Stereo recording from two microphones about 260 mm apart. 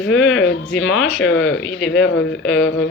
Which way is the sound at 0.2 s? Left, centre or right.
Left.